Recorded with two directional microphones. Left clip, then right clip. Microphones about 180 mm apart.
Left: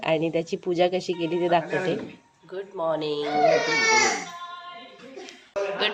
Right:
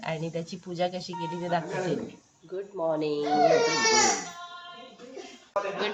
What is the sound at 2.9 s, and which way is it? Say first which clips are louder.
Speech: left 2 dB; 10° right (ahead or behind).